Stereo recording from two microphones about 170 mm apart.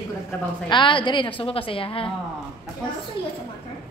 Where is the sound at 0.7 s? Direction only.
30° left (ahead or behind).